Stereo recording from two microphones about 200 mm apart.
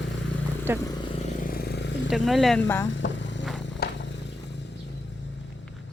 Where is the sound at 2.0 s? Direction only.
Centre (ahead or behind).